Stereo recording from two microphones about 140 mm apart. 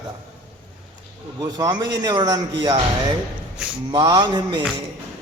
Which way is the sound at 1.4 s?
25° right (ahead or behind).